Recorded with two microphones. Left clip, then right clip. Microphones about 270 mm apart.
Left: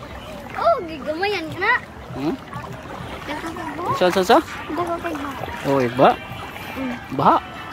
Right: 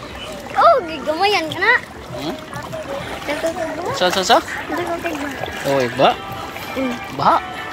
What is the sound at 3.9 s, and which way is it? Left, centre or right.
Speech, left.